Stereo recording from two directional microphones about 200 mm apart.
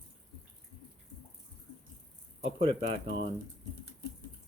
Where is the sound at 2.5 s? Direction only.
25° right (ahead or behind).